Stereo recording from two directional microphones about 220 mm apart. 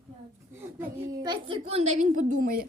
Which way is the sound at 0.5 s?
15° right (ahead or behind).